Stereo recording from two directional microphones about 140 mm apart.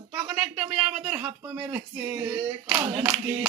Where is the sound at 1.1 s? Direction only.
20° right (ahead or behind).